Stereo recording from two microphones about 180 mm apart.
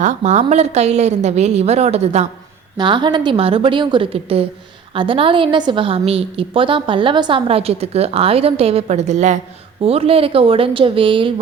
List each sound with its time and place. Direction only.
0.0 s a woman's voice: 40° right (ahead or behind)
2.7 s a woman's voice: 25° right (ahead or behind)